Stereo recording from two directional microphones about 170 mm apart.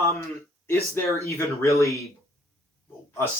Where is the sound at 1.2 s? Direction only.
15° left (ahead or behind).